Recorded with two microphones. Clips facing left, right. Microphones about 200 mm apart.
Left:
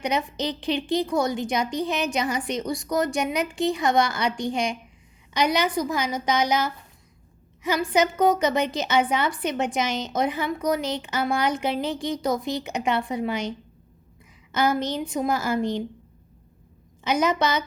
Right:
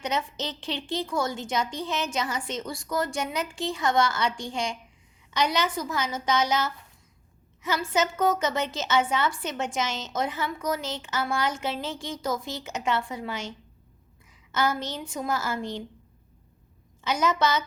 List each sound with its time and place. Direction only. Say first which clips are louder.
0.0 s a woman's voice: left 4 dB; 15° left (ahead or behind)
17.0 s a woman's voice: left 3 dB; 15° left (ahead or behind)